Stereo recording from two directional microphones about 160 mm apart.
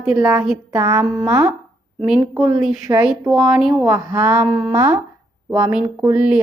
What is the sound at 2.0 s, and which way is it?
Speech, 5° right (ahead or behind).